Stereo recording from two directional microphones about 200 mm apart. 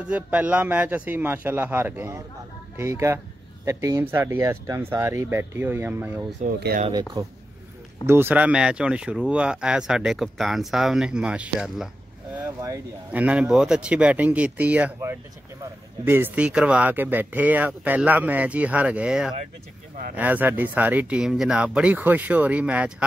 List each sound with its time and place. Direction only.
0.1 s speech: 5° right (ahead or behind)
6.4 s speech: 50° right (ahead or behind)
6.9 s speech: 20° right (ahead or behind)
8.1 s speech: 10° right (ahead or behind)
12.4 s speech: 15° right (ahead or behind)